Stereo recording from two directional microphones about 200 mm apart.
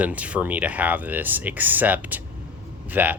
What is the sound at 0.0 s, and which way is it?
Speech, 5° right (ahead or behind).